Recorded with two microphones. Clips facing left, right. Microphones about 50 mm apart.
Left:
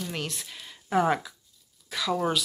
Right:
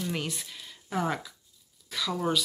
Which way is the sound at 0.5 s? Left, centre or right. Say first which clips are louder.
Left 7 dB; centre.